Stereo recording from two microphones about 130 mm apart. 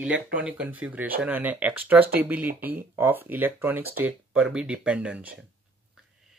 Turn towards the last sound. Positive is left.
turn(degrees=-10)  # may be behind; listen again after turning